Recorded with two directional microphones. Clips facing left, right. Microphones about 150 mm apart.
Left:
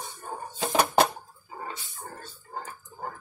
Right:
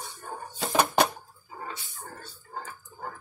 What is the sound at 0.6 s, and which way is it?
Music, 20° left (ahead or behind).